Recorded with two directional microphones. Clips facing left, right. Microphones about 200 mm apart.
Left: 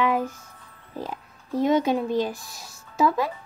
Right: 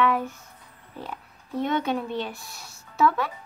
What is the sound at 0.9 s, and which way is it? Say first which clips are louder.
Speech: left 4 dB; 35° left (ahead or behind).